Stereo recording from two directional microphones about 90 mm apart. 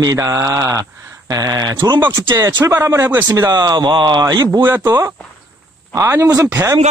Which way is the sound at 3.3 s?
45° right (ahead or behind).